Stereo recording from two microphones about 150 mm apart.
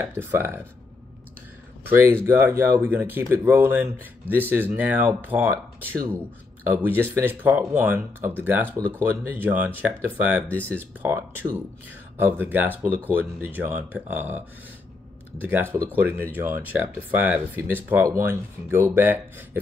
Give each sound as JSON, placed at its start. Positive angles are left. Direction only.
{"t": 0.0, "sound": "speech", "side_deg": -15}
{"t": 1.9, "sound": "speech", "side_deg": -15}